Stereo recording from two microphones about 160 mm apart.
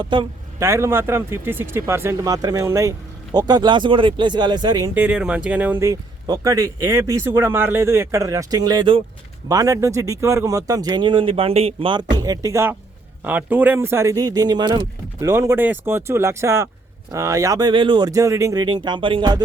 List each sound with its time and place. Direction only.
0.0 s a man's voice: 30° right (ahead or behind)
0.6 s speech: 15° right (ahead or behind)
4.9 s speech: 5° right (ahead or behind); by 19.4 s 30° right (ahead or behind)